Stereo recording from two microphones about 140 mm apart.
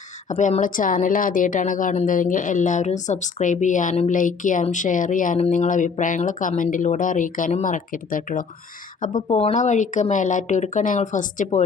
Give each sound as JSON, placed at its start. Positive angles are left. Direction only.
{"t": 0.3, "sound": "a woman's voice", "side_deg": 60}
{"t": 9.3, "sound": "a woman's voice", "side_deg": 55}